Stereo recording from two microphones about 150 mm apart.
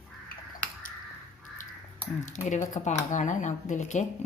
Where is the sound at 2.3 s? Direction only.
55° left (ahead or behind).